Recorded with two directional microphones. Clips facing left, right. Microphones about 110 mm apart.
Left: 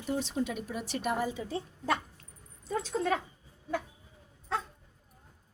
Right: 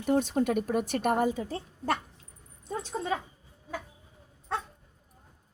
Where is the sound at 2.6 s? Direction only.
90° left.